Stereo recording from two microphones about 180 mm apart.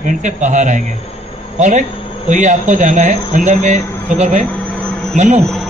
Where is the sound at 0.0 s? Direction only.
40° right (ahead or behind).